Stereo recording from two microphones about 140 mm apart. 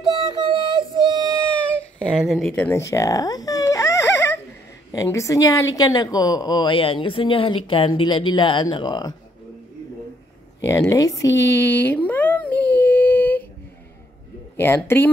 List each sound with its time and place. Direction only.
0.0 s music: 30° right (ahead or behind)
2.1 s speech: centre (ahead or behind)
2.7 s baby cry: 20° left (ahead or behind)
4.9 s speech: 20° left (ahead or behind)
10.6 s a sound: 20° left (ahead or behind)